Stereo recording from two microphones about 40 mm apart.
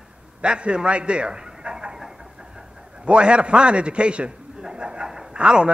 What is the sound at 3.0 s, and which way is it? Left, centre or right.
A man's voice, right.